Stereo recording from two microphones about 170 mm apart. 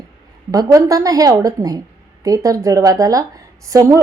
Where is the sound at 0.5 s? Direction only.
20° right (ahead or behind).